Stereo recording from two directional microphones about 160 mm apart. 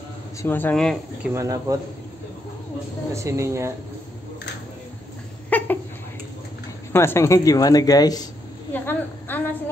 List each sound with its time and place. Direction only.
0.4 s speech: 10° left (ahead or behind)
1.3 s speech: 20° right (ahead or behind)
3.1 s speech: 20° right (ahead or behind)
5.5 s a sound: 10° left (ahead or behind)
6.9 s speech: 15° left (ahead or behind)
8.7 s a sound: 10° left (ahead or behind)